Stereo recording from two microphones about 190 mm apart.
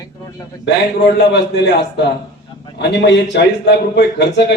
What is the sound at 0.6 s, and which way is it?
A man's voice, 65° left (ahead or behind).